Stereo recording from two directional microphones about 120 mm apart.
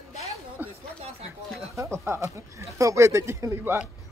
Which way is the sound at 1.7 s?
25° right (ahead or behind).